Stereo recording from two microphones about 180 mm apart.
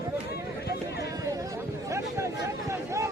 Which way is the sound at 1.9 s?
15° right (ahead or behind).